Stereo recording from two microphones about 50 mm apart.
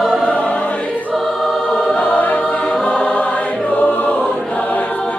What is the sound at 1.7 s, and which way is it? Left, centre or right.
Music, centre.